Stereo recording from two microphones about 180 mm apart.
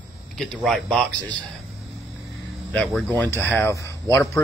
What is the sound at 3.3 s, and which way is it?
Speech, 10° left (ahead or behind).